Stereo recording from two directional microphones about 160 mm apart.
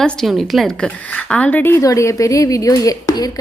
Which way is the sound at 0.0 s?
5° left (ahead or behind).